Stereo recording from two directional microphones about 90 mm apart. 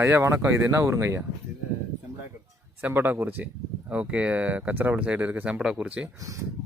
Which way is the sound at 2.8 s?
20° right (ahead or behind).